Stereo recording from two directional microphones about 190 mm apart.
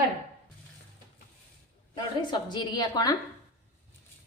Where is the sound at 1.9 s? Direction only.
25° left (ahead or behind).